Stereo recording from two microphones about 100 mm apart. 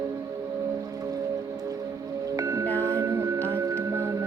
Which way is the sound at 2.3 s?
35° right (ahead or behind).